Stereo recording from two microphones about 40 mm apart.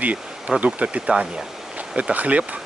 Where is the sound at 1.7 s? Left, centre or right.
Right.